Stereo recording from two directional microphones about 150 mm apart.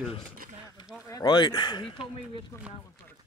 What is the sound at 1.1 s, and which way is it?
Speech, 30° left (ahead or behind).